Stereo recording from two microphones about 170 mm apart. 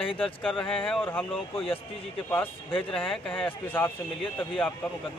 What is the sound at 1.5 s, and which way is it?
A man's voice, 35° left (ahead or behind).